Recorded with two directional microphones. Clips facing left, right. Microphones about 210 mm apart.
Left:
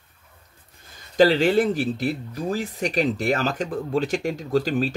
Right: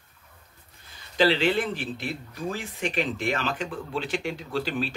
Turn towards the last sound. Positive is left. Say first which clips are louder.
# left 7 dB
turn(degrees=40)  # may be behind; listen again after turning